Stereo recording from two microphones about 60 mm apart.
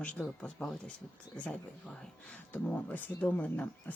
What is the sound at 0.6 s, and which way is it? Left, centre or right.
Speech, left.